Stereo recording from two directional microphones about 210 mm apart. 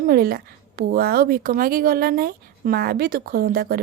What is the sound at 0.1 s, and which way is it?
A woman's voice, 45° right (ahead or behind).